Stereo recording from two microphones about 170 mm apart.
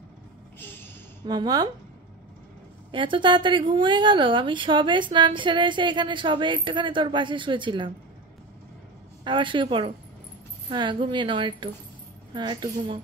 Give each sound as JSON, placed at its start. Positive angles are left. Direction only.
{"t": 0.6, "sound": "a sound", "side_deg": 10}
{"t": 1.2, "sound": "a woman's voice", "side_deg": -25}
{"t": 2.9, "sound": "a woman's voice", "side_deg": -30}
{"t": 9.2, "sound": "a woman's voice", "side_deg": -30}